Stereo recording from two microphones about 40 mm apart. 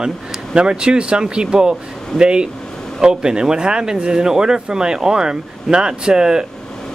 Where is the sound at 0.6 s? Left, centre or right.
Right.